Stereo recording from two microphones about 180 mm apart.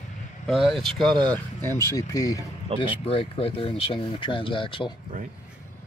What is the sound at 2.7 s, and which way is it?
Speech, 35° right (ahead or behind).